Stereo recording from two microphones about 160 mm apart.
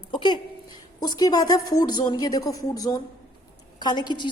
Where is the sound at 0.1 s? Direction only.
30° left (ahead or behind).